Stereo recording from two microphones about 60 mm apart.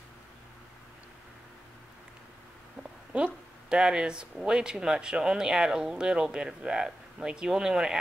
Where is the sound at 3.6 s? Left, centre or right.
Centre.